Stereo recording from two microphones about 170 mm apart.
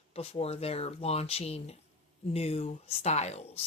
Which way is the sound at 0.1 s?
35° left (ahead or behind).